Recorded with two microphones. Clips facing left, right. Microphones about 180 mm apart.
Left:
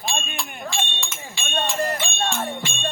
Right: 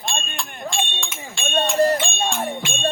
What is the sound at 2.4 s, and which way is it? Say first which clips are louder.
Jingle bell: right 2 dB; 20° right (ahead or behind).